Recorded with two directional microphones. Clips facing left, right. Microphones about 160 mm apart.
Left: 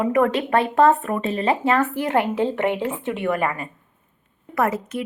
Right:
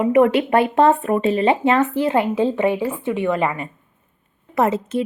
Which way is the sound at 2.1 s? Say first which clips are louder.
Even; 10° right (ahead or behind).